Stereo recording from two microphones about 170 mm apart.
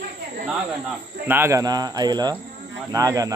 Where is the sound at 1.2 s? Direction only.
15° right (ahead or behind).